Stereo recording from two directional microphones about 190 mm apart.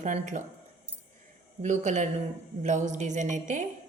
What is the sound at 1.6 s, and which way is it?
A woman's voice, 40° right (ahead or behind).